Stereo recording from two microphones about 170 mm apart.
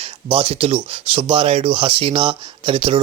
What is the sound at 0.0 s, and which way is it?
Speech, 35° right (ahead or behind).